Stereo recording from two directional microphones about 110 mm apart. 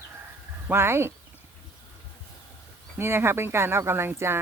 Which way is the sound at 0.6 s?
20° right (ahead or behind).